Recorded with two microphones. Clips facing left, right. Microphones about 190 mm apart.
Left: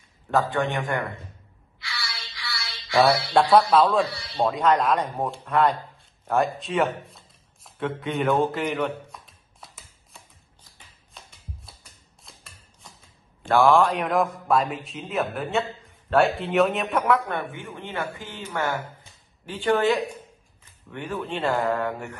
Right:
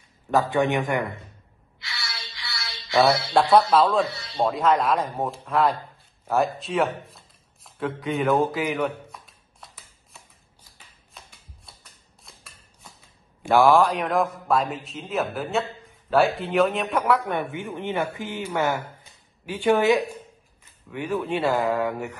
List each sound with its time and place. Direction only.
0.5 s speech: 15° right (ahead or behind)
1.9 s a sound: 20° right (ahead or behind)
3.5 s a man's voice: centre (ahead or behind)
11.1 s shuffling cards: centre (ahead or behind)
12.2 s a sound: centre (ahead or behind)
13.4 s a man's voice: 10° right (ahead or behind)
17.2 s speech: 15° right (ahead or behind)